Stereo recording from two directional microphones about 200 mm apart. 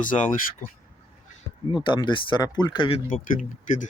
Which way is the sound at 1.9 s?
25° left (ahead or behind).